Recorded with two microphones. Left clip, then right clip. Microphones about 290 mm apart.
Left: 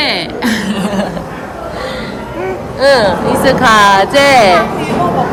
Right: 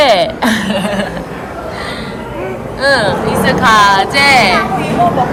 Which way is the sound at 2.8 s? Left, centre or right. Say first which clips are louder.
Left 3 dB; left.